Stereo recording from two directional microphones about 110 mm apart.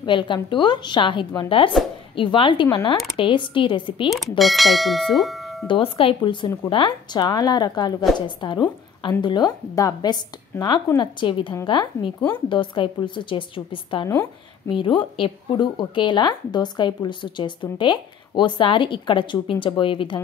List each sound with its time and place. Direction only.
0.0 s a woman's voice: 45° left (ahead or behind)
4.1 s speech: centre (ahead or behind)
5.7 s a woman's voice: 55° left (ahead or behind)
14.0 s a woman's voice: 25° left (ahead or behind)
14.7 s a woman's voice: 50° left (ahead or behind)